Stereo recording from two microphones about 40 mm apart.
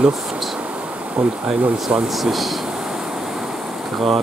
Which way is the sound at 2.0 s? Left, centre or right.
Centre.